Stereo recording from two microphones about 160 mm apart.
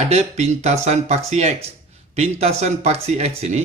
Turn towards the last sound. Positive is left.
turn(degrees=-40)  # may be behind; listen again after turning